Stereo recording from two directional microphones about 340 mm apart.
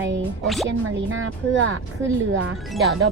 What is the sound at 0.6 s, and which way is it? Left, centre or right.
Speech, right.